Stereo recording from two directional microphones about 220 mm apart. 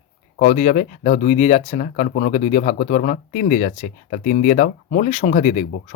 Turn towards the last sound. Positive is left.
turn(degrees=35)  # may be behind; listen again after turning